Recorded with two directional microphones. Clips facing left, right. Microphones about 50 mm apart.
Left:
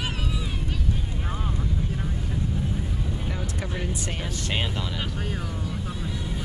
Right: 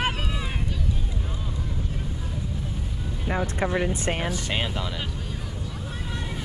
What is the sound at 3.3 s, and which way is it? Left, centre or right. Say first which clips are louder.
Vehicle: right 7 dB; right.